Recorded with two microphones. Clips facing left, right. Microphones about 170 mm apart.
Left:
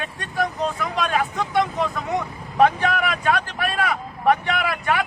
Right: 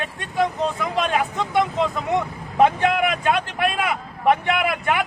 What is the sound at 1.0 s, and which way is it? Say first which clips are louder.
Speech: even; 20° right (ahead or behind).